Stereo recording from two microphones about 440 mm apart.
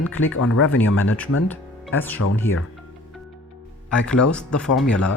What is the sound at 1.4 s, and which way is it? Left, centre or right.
Speech, centre.